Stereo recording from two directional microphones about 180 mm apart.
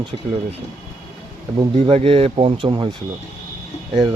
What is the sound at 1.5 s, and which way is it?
Speech, 30° right (ahead or behind).